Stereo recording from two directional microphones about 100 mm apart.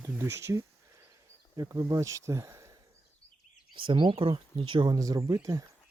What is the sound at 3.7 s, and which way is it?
Speech, 55° right (ahead or behind).